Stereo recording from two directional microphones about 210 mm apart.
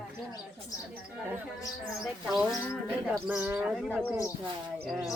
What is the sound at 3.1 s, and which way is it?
Speech, 10° right (ahead or behind).